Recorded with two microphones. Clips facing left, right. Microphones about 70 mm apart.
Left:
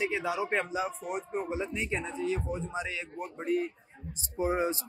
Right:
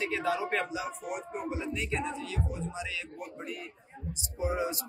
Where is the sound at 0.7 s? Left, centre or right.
Left.